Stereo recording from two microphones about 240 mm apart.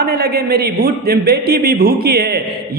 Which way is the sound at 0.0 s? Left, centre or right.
Right.